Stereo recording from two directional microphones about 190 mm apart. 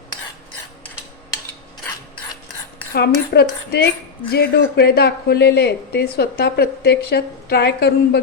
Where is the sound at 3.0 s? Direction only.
55° left (ahead or behind).